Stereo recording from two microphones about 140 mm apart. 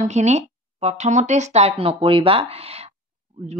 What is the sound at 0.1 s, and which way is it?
Speech, 55° right (ahead or behind).